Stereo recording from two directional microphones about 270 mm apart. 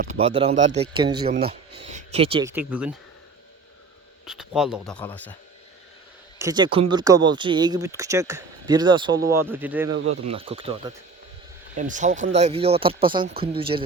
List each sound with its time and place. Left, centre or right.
0.2 s speech: right
2.5 s speech: centre
4.3 s speech: centre
6.4 s speech: centre
10.1 s speech: right